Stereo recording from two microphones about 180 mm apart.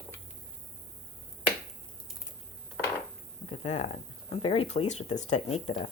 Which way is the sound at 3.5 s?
40° left (ahead or behind).